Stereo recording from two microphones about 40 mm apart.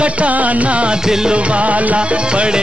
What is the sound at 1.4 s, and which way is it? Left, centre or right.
Music, right.